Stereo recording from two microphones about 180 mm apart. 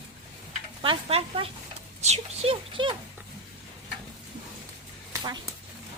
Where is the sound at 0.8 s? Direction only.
30° right (ahead or behind).